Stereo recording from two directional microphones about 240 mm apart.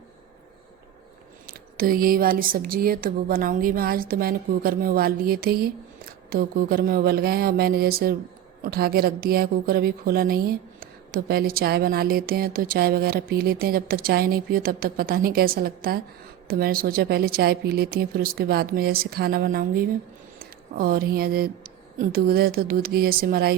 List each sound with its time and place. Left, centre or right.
1.5 s a woman's voice: right